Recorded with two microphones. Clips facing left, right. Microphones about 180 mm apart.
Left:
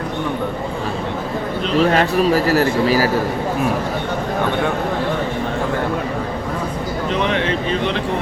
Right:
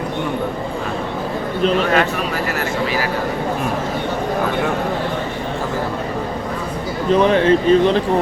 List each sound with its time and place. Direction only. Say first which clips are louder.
1.9 s speech: left 3 dB; 35° left (ahead or behind)
7.1 s speech: right 8 dB; 40° right (ahead or behind)